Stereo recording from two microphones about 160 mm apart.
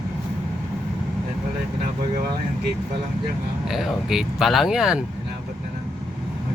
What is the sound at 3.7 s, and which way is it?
Speech, centre (ahead or behind).